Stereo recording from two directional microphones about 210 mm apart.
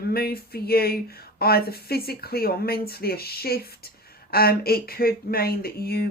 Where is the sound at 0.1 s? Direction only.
45° left (ahead or behind).